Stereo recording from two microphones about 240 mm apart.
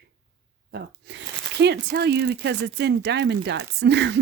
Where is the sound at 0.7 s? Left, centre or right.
Right.